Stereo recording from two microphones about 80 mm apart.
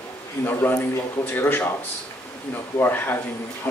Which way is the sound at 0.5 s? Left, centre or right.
Left.